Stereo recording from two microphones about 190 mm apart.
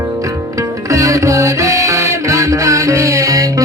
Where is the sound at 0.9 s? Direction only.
15° right (ahead or behind).